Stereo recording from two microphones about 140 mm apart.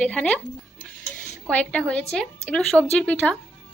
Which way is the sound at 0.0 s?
10° left (ahead or behind).